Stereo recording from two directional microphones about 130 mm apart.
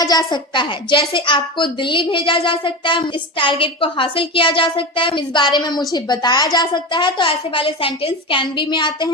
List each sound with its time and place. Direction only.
0.0 s a woman's voice: 30° left (ahead or behind)